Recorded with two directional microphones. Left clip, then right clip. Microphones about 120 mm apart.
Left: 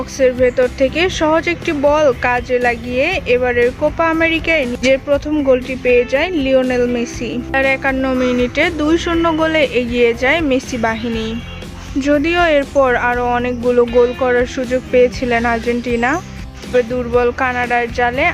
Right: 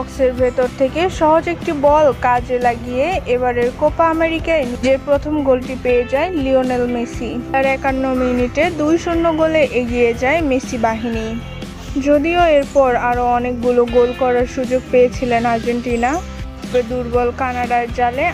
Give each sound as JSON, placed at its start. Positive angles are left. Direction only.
{"t": 0.2, "sound": "speech", "side_deg": 25}
{"t": 5.9, "sound": "speech", "side_deg": 10}